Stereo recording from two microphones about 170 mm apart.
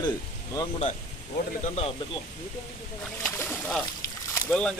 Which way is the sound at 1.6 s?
40° left (ahead or behind).